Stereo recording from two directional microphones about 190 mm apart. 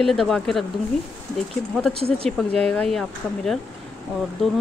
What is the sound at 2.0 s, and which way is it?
Speech, 30° right (ahead or behind).